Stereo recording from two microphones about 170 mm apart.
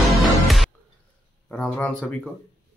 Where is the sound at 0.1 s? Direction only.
Centre (ahead or behind).